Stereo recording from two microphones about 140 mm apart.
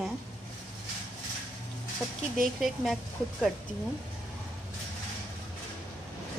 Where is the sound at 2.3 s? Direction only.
Centre (ahead or behind).